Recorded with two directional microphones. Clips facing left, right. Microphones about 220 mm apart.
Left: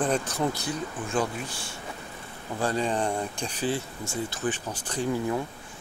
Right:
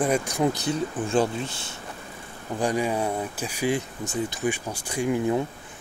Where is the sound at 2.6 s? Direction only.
10° right (ahead or behind).